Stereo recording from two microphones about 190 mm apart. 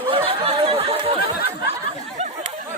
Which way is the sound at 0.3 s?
30° right (ahead or behind).